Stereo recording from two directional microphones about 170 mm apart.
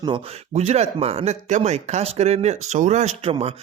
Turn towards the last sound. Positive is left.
turn(degrees=-35)  # may be behind; listen again after turning